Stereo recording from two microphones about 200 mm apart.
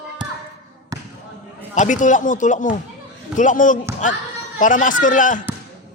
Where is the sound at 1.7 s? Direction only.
40° left (ahead or behind).